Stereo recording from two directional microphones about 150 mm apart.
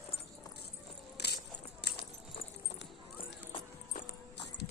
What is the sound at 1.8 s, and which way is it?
Clip-clop, 90° left.